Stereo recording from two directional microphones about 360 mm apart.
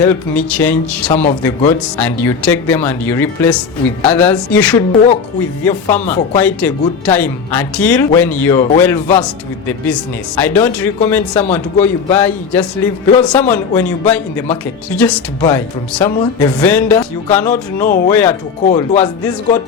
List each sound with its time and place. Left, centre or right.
0.0 s a man's voice: centre
1.1 s speech: centre
2.0 s a man's voice: centre
18.7 s speech: centre